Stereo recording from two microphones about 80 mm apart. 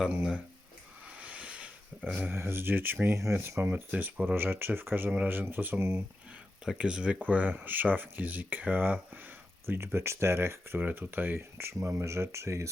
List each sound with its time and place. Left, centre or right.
1.2 s a sound: centre
2.1 s speech: right
6.7 s speech: centre
9.6 s speech: right